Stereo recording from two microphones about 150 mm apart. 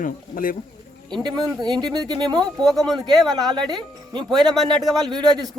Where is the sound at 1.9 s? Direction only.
25° right (ahead or behind).